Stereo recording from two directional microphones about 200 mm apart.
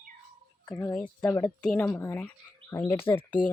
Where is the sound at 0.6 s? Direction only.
15° left (ahead or behind).